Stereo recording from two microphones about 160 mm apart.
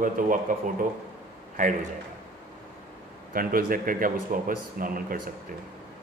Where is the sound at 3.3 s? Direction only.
65° right (ahead or behind).